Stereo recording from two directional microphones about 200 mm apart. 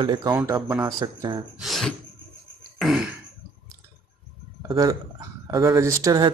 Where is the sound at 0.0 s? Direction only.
20° right (ahead or behind).